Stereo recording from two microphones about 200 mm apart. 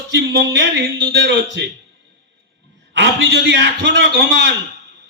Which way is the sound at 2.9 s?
60° right (ahead or behind).